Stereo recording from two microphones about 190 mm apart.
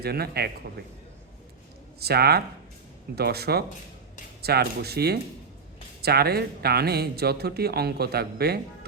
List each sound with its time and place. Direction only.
0.0 s a man's voice: 55° right (ahead or behind)
2.0 s a man's voice: 55° right (ahead or behind)